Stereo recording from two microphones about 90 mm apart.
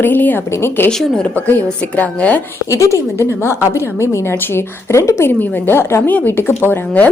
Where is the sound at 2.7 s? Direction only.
35° left (ahead or behind).